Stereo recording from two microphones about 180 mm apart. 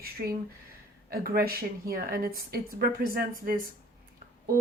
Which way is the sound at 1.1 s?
60° right (ahead or behind).